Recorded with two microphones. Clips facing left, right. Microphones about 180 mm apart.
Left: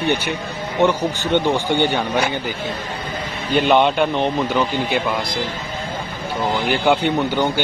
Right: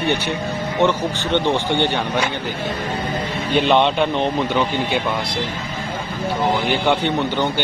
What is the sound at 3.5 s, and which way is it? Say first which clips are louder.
A man's voice: left 1 dB; 5° left (ahead or behind).